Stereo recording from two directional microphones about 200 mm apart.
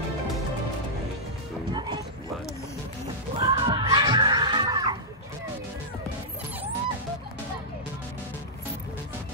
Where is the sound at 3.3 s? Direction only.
20° right (ahead or behind).